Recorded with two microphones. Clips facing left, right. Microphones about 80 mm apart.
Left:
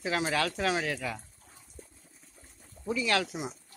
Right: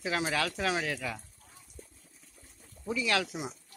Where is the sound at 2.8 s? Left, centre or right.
Centre.